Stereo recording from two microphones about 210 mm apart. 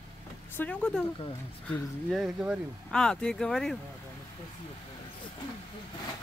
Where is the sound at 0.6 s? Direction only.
5° left (ahead or behind).